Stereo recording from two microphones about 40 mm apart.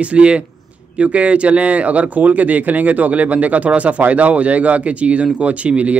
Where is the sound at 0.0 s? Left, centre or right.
Right.